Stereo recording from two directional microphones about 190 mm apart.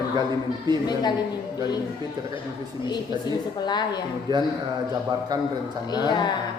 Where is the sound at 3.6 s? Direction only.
20° left (ahead or behind).